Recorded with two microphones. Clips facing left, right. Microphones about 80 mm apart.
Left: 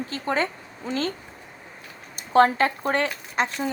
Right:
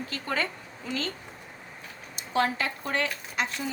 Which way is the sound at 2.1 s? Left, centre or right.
Left.